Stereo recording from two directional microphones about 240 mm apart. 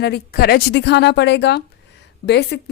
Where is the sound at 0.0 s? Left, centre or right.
Left.